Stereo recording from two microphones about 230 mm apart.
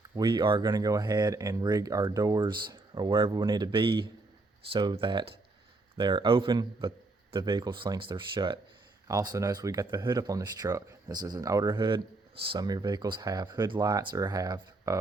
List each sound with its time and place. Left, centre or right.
0.2 s a man's voice: centre